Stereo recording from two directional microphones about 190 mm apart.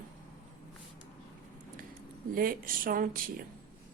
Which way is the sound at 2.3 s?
50° right (ahead or behind).